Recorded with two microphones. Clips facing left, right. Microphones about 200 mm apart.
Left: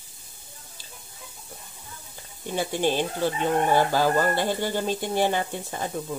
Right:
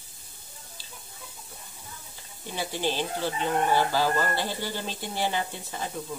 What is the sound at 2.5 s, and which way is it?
Speech, 50° left (ahead or behind).